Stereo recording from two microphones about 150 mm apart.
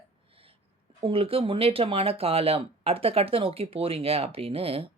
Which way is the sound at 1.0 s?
40° right (ahead or behind).